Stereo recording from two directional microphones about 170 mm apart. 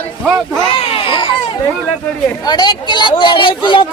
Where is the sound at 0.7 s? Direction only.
30° left (ahead or behind).